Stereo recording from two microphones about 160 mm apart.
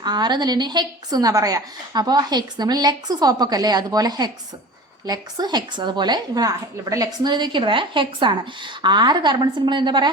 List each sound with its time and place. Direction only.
0.0 s a woman's voice: 25° right (ahead or behind)